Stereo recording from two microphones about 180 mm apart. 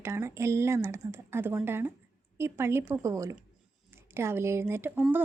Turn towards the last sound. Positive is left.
turn(degrees=-10)  # may be behind; listen again after turning